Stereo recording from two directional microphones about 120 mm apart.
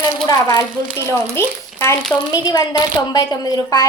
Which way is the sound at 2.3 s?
35° left (ahead or behind).